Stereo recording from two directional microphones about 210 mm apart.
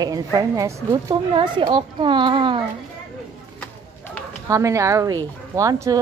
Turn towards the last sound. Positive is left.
turn(degrees=-15)  # may be behind; listen again after turning